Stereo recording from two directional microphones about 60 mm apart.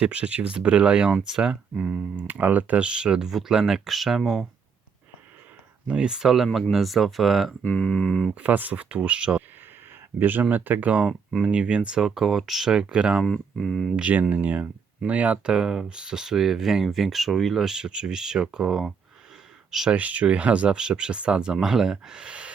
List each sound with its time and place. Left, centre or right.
0.0 s speech: centre
2.1 s speech: right; by 4.4 s centre
5.9 s speech: centre
7.6 s speech: left
8.4 s speech: right
10.2 s speech: right; by 13.2 s centre
13.2 s speech: centre
13.9 s speech: right
15.5 s speech: centre
19.9 s speech: right
21.5 s speech: centre